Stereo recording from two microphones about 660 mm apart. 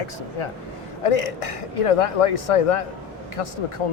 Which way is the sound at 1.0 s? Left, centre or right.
Left.